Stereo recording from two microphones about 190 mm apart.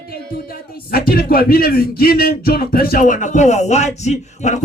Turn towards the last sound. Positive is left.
turn(degrees=35)  # may be behind; listen again after turning